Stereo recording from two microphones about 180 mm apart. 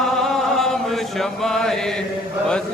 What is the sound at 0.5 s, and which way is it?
Chant, centre (ahead or behind).